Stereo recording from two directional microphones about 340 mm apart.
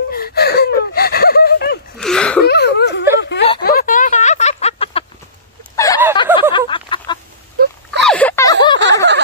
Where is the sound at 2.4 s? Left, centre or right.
Left; by 8.5 s centre.